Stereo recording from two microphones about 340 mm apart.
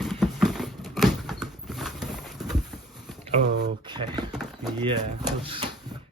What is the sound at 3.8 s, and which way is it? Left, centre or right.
Speech, centre.